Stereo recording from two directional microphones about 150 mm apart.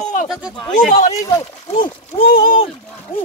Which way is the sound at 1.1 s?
20° left (ahead or behind).